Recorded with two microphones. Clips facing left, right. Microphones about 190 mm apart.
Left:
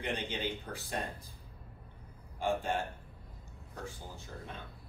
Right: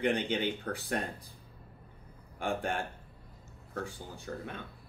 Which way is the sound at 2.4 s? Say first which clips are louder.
Left 1 dB; 75° right (ahead or behind).